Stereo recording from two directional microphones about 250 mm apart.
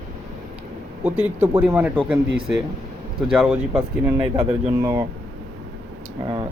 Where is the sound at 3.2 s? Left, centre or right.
Centre.